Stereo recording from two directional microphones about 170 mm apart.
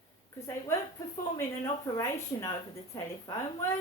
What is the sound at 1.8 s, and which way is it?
A woman's voice, 20° left (ahead or behind).